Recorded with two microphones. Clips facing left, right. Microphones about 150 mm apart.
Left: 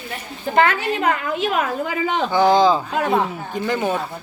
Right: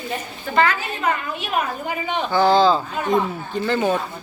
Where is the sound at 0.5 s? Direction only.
60° left (ahead or behind); by 2.3 s 90° left.